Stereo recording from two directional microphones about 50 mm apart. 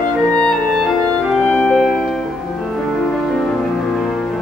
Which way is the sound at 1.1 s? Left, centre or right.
Left.